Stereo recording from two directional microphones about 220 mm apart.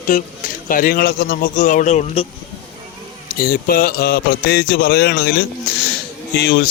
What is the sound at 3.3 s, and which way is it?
Speech, 40° left (ahead or behind).